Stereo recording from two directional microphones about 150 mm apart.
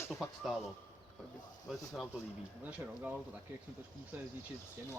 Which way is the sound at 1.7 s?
Centre (ahead or behind).